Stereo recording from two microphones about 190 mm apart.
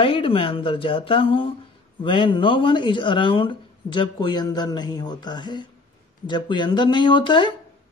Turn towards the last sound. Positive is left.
turn(degrees=25)  # may be behind; listen again after turning